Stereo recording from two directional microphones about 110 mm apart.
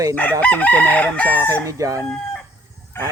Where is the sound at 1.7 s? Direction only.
30° right (ahead or behind).